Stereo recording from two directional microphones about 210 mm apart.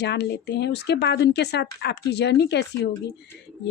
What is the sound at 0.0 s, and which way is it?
A woman's voice, 55° left (ahead or behind).